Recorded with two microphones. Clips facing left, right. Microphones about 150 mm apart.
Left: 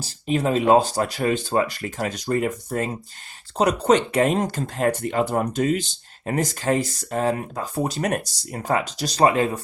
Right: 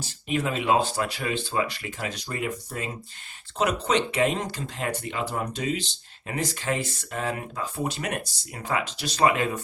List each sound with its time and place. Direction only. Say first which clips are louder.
0.0 s speech: left 5 dB; 35° left (ahead or behind)